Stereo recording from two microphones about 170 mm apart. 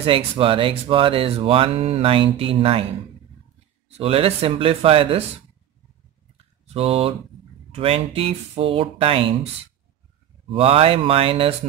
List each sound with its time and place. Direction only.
0.0 s speech: 30° right (ahead or behind)
3.9 s speech: 35° right (ahead or behind)
6.3 s a sound: 35° right (ahead or behind)
7.7 s speech: 35° right (ahead or behind)
10.5 s speech: 35° right (ahead or behind)